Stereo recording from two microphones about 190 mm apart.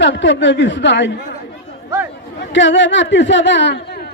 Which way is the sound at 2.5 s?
75° left (ahead or behind).